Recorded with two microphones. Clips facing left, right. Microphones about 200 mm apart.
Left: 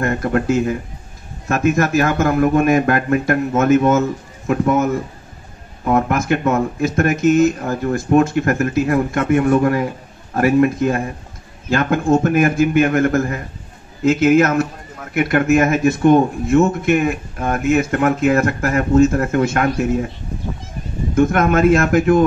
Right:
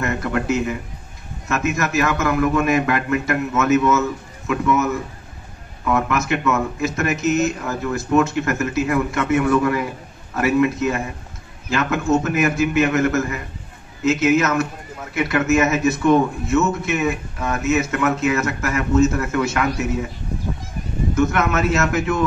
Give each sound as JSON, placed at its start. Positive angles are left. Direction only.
{"t": 0.0, "sound": "a man's voice", "side_deg": 50}
{"t": 21.3, "sound": "a man's voice", "side_deg": 50}